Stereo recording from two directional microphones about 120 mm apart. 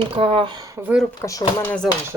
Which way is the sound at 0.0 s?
50° right (ahead or behind).